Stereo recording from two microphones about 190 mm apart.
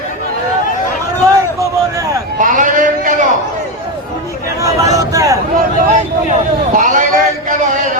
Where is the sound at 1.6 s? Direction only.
15° right (ahead or behind).